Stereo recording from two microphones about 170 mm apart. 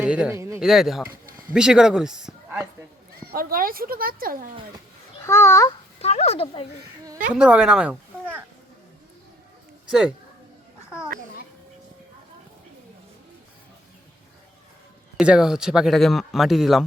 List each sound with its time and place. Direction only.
0.0 s speech: 5° right (ahead or behind)
0.6 s speech: centre (ahead or behind)
3.3 s speech: 55° right (ahead or behind)
5.2 s a child's voice: 15° left (ahead or behind)
6.0 s speech: 40° left (ahead or behind)
7.3 s speech: 5° right (ahead or behind)
9.8 s a sound: 5° right (ahead or behind)
10.8 s children playing: 5° right (ahead or behind)
15.2 s speech: 5° right (ahead or behind)